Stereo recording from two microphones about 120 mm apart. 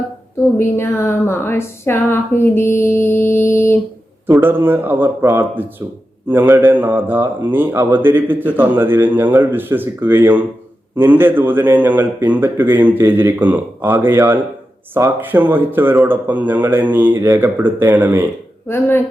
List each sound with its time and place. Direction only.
0.6 s a woman's voice: 20° left (ahead or behind)
4.3 s a man's voice: 20° right (ahead or behind)
18.7 s a woman's voice: 20° left (ahead or behind)